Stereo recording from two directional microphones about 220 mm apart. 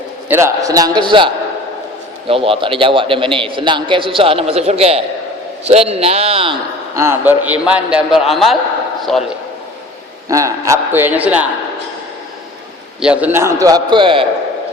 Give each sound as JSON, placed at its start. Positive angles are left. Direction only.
{"t": 0.3, "sound": "a man's voice", "side_deg": -10}
{"t": 10.2, "sound": "a man's voice", "side_deg": -15}
{"t": 13.0, "sound": "a man's voice", "side_deg": -5}